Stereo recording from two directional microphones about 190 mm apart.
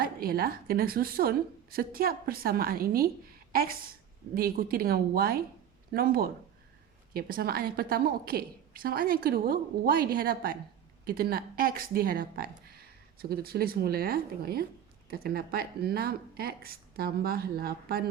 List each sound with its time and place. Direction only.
0.0 s a woman's voice: 50° right (ahead or behind)